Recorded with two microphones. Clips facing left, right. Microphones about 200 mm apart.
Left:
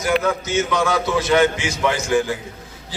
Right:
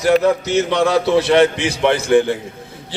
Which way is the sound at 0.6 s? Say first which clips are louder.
Right 4 dB; 35° right (ahead or behind).